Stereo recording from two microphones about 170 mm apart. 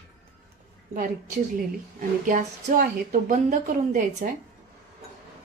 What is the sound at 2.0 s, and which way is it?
A woman's voice, 50° right (ahead or behind).